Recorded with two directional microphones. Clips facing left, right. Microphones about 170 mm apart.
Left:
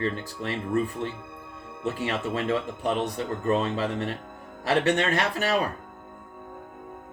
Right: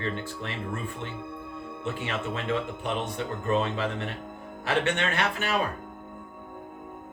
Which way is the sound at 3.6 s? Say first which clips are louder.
Left 3 dB; 40° left (ahead or behind).